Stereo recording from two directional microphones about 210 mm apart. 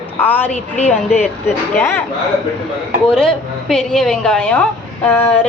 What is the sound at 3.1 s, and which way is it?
A woman's voice, centre (ahead or behind).